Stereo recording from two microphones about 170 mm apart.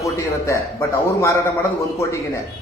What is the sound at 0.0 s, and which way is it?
Speech, 15° left (ahead or behind).